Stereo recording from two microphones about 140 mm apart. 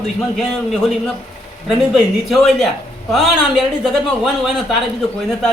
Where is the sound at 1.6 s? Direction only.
Centre (ahead or behind).